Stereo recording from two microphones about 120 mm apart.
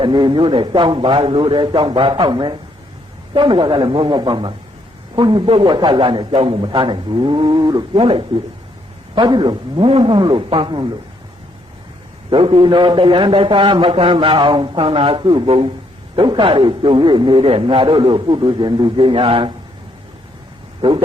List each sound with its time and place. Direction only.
0.0 s a man's voice: 40° right (ahead or behind)
7.9 s a man's voice: 50° right (ahead or behind)
12.3 s a man's voice: 45° right (ahead or behind)